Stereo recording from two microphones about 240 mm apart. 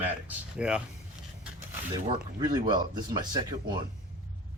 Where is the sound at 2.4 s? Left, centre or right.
Centre.